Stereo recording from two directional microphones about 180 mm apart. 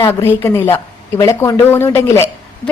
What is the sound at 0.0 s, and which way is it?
A woman's voice, 15° left (ahead or behind).